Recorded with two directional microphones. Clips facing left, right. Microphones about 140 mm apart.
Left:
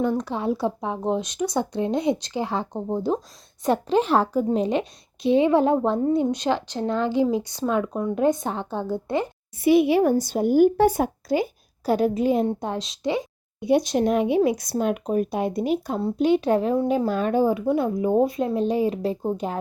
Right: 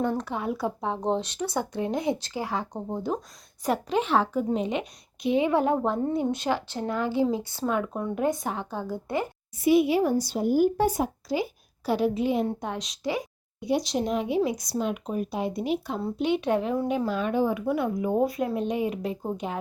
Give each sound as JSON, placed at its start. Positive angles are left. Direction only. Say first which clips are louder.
{"t": 0.2, "sound": "a woman's voice", "louder": "left 4 dB", "side_deg": 25}
{"t": 0.9, "sound": "a woman's voice", "louder": "left 2 dB", "side_deg": 10}
{"t": 9.6, "sound": "speech", "louder": "left 3 dB", "side_deg": 65}
{"t": 12.5, "sound": "a woman's voice", "louder": "left 4 dB", "side_deg": 30}
{"t": 13.6, "sound": "speech", "louder": "left 6 dB", "side_deg": 55}